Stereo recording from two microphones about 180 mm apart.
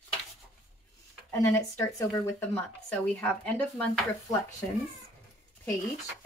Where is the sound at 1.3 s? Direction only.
15° left (ahead or behind).